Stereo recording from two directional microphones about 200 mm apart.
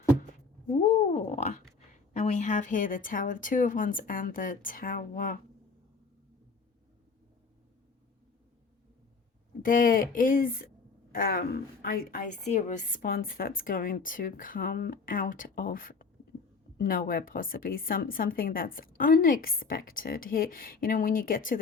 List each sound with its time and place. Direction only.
0.7 s a woman's voice: 35° left (ahead or behind)
9.6 s a woman's voice: 45° left (ahead or behind)